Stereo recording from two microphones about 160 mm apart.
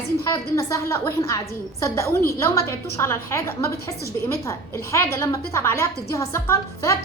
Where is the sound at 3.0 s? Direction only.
15° left (ahead or behind).